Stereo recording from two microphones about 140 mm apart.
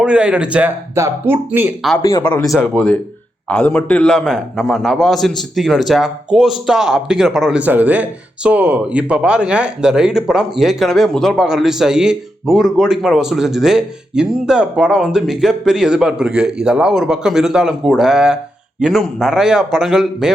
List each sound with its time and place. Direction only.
0.0 s speech: 10° right (ahead or behind)
2.0 s speech: 20° left (ahead or behind)
2.5 s a man's voice: centre (ahead or behind)